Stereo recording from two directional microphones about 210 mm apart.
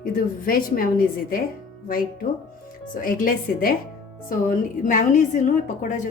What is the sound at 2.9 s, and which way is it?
Speech, 40° left (ahead or behind).